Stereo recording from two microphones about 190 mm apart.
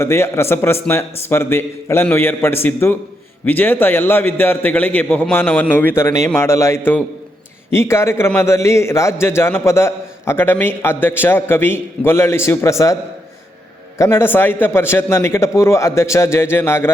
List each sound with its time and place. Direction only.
0.0 s a man's voice: 15° left (ahead or behind)
14.0 s a man's voice: 10° left (ahead or behind)